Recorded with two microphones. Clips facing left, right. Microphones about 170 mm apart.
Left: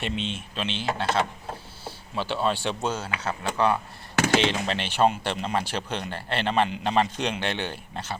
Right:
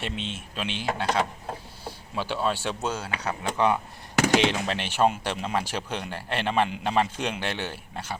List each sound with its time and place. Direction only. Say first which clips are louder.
0.0 s speech: left 3 dB; centre (ahead or behind)